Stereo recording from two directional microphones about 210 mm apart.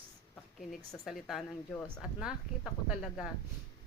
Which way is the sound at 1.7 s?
10° left (ahead or behind).